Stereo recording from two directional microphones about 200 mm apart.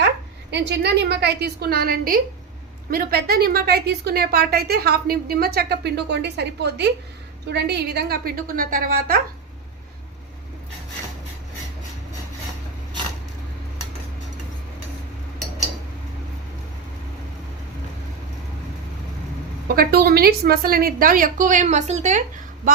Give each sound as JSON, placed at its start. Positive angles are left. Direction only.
{"t": 0.5, "sound": "a woman's voice", "side_deg": -60}
{"t": 19.6, "sound": "a woman's voice", "side_deg": -50}